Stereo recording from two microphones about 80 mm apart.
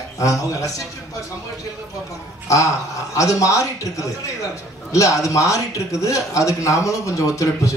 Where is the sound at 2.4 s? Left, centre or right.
Left.